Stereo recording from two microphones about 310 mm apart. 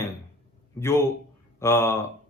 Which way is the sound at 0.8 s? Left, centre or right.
Centre.